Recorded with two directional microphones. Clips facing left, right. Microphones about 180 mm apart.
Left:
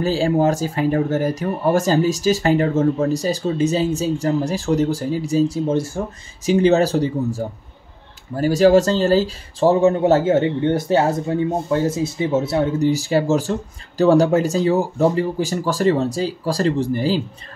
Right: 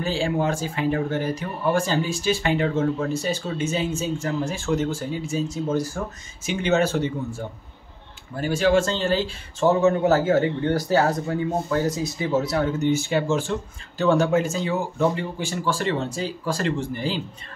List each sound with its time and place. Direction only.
0.0 s speech: 40° left (ahead or behind)